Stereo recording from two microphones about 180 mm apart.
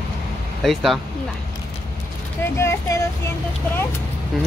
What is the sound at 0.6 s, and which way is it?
Speech, centre (ahead or behind).